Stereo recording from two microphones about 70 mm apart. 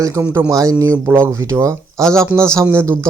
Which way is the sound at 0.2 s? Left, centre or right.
Right.